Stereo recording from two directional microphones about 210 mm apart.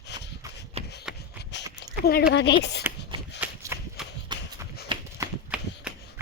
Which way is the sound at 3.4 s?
10° right (ahead or behind).